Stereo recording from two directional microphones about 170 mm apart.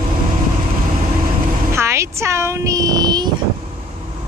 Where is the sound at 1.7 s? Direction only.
15° right (ahead or behind).